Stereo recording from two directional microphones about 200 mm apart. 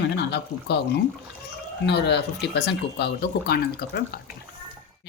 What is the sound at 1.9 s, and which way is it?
Speech, 55° left (ahead or behind).